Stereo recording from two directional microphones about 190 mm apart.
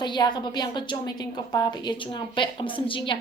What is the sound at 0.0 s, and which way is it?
A woman's voice, 25° left (ahead or behind).